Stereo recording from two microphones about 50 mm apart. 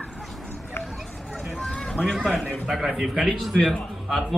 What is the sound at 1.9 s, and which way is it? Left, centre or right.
A man's voice, centre.